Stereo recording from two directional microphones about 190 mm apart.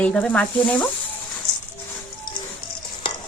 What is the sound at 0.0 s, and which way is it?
Speech, 5° left (ahead or behind).